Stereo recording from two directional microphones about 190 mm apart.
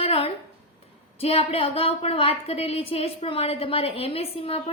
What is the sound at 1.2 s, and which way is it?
A woman's voice, 30° left (ahead or behind).